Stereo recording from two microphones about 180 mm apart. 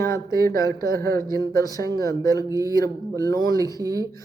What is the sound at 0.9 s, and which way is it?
Speech, 55° right (ahead or behind).